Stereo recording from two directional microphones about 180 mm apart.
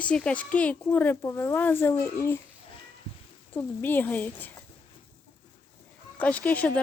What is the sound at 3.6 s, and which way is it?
A woman's voice, 10° left (ahead or behind).